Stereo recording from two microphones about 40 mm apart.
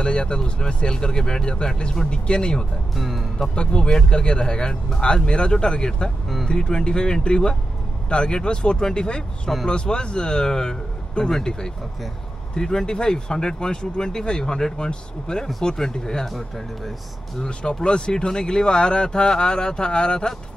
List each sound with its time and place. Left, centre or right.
0.0 s speech: left
2.9 s speech: centre
3.5 s speech: left
16.3 s speech: centre
17.4 s speech: left